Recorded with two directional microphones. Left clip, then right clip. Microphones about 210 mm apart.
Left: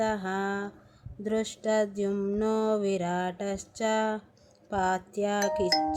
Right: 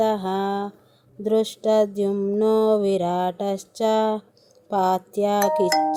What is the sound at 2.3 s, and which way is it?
Speech, 20° right (ahead or behind).